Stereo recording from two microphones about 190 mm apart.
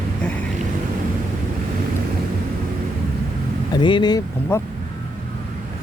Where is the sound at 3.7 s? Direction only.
25° left (ahead or behind).